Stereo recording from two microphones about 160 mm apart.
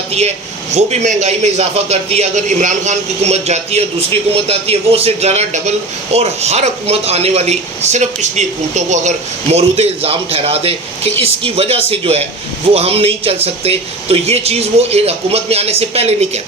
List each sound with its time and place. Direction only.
0.1 s speech: 45° right (ahead or behind)